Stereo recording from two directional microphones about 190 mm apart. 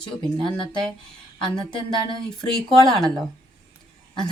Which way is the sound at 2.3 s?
Centre (ahead or behind).